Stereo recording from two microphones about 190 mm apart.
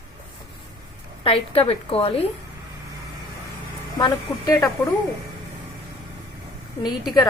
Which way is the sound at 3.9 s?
20° left (ahead or behind).